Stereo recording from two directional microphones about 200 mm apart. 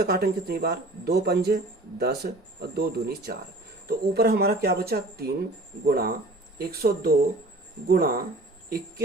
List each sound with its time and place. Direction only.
0.0 s speech: 50° right (ahead or behind)